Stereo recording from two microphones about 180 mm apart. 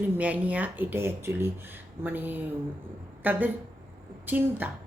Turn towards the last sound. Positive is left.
turn(degrees=-10)  # may be behind; listen again after turning